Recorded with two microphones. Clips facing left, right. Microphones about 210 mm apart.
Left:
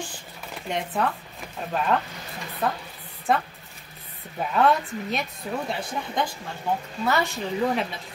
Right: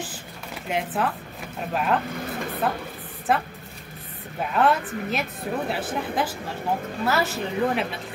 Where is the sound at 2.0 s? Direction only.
55° right (ahead or behind).